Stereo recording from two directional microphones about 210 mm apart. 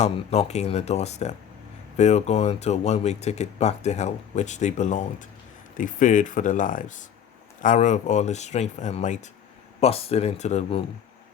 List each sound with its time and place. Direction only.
0.0 s speech: 30° left (ahead or behind)